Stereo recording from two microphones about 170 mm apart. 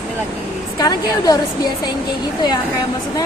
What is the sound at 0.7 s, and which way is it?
Speech, 20° left (ahead or behind).